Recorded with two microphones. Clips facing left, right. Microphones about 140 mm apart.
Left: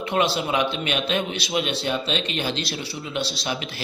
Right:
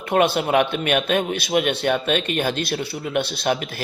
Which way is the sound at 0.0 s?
50° right (ahead or behind).